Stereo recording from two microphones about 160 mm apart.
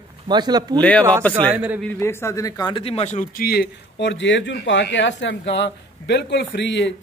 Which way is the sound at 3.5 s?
85° left.